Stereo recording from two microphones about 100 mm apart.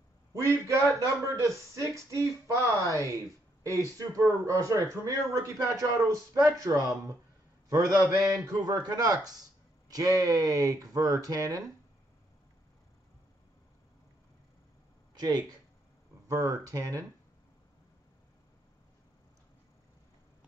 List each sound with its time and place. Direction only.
0.3 s a man's voice: 30° right (ahead or behind)
15.1 s a man's voice: 40° right (ahead or behind)